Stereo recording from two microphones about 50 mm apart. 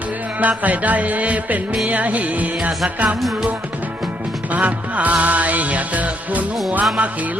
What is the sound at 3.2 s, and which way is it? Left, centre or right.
Music, centre.